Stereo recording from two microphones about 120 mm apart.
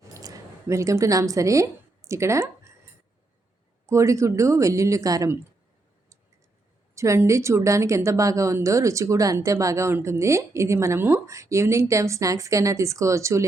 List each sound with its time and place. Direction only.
0.0 s a sound: 30° right (ahead or behind)
3.8 s a woman's voice: 25° right (ahead or behind)
6.9 s a woman's voice: 25° right (ahead or behind)